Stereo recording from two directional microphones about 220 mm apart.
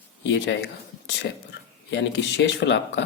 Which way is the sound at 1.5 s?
55° left (ahead or behind).